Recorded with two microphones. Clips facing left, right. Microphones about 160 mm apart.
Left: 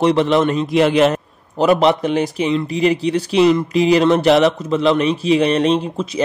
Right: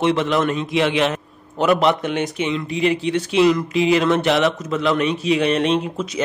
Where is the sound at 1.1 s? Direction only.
35° left (ahead or behind).